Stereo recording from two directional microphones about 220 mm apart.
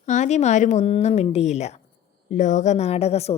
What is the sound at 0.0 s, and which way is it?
A woman's voice, 35° left (ahead or behind).